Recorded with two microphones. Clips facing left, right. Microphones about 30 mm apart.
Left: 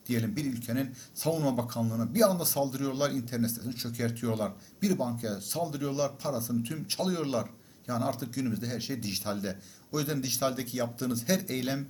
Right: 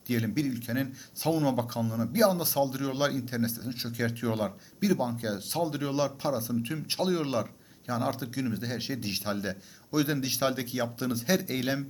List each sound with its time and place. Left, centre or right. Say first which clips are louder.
0.1 s a man's voice: right 2 dB; centre